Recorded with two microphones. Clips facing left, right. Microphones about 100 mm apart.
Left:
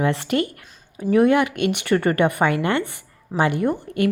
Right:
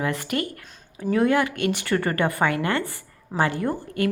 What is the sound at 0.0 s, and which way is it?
Speech, 25° left (ahead or behind).